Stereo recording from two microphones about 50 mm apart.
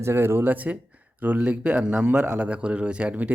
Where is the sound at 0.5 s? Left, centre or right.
Right.